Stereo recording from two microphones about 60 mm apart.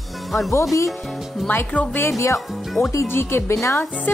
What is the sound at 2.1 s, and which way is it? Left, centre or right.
Speech, left.